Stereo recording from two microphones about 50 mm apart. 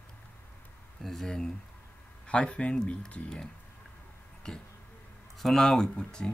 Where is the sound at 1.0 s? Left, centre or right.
Centre.